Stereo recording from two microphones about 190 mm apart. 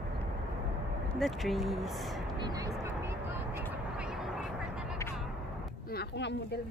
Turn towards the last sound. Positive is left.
turn(degrees=60)  # may be behind; listen again after turning